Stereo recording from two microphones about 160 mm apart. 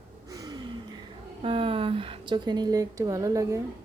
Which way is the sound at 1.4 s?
35° right (ahead or behind).